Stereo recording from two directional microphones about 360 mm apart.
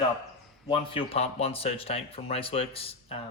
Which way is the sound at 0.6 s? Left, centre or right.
Centre.